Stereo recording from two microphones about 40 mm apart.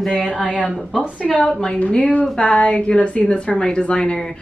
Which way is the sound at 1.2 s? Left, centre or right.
Left.